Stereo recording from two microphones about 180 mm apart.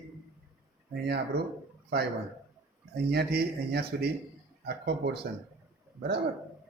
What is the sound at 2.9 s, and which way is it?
Speech, 65° right (ahead or behind).